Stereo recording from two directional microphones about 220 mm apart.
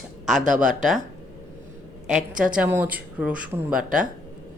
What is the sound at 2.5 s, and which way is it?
Speech, 10° right (ahead or behind).